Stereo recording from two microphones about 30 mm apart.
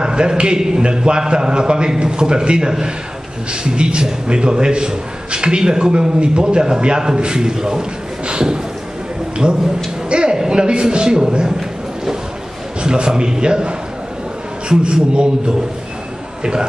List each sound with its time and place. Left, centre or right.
0.0 s a man's voice: right
9.4 s a man's voice: right
12.8 s a man's voice: right